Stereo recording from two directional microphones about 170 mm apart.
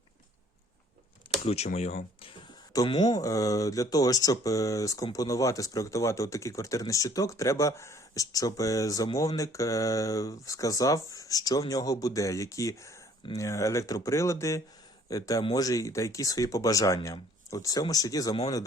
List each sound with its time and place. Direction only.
1.5 s speech: 40° left (ahead or behind)
2.7 s speech: 25° left (ahead or behind)